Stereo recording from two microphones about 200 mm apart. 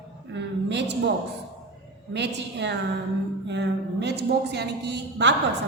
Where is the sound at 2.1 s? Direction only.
60° right (ahead or behind).